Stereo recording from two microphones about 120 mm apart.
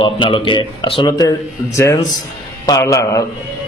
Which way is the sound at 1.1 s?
30° left (ahead or behind).